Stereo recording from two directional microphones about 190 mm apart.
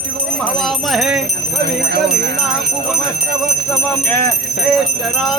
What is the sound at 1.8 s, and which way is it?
Speech, 60° right (ahead or behind).